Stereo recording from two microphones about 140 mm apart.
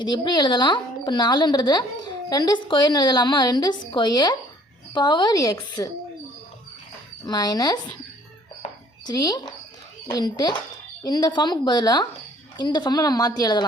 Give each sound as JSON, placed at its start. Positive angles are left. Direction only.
{"t": 0.0, "sound": "a woman's voice", "side_deg": 30}
{"t": 7.3, "sound": "a woman's voice", "side_deg": 30}
{"t": 9.0, "sound": "a woman's voice", "side_deg": 25}